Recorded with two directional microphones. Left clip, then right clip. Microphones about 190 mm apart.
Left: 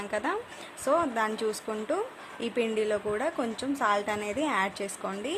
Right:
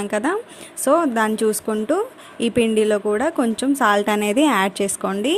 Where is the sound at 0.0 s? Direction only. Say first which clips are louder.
Right 9 dB; 30° right (ahead or behind).